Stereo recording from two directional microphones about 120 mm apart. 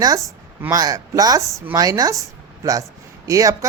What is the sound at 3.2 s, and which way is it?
Speech, 30° right (ahead or behind).